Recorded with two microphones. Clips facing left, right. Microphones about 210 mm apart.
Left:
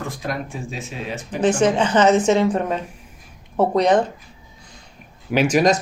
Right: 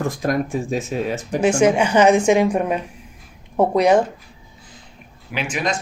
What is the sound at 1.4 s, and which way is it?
A woman's voice, 10° right (ahead or behind).